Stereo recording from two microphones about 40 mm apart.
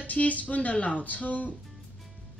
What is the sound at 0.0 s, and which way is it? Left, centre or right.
Speech, left.